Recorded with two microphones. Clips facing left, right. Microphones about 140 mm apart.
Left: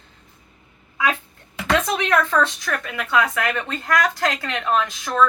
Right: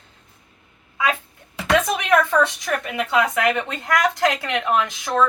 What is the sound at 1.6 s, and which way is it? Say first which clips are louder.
A woman's voice: right 2 dB; 15° right (ahead or behind).